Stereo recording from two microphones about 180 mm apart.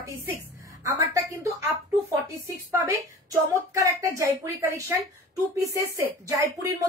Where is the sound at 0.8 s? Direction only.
15° right (ahead or behind).